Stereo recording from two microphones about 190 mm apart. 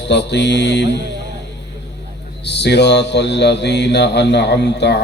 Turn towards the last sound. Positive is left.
turn(degrees=65)  # may be behind; listen again after turning